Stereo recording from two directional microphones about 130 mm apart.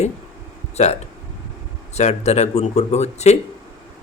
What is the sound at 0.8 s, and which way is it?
Speech, 60° left (ahead or behind).